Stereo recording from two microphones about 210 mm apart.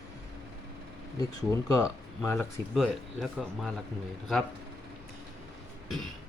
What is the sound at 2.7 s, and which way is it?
Speech, centre (ahead or behind).